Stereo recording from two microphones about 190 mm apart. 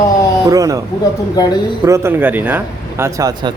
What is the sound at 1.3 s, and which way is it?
Speech, 20° left (ahead or behind).